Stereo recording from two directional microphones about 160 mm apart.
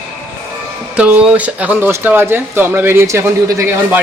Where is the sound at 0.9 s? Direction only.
10° right (ahead or behind).